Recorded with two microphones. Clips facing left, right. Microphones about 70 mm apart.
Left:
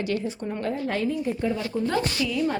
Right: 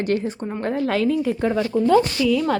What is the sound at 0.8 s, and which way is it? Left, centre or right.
Speech, right.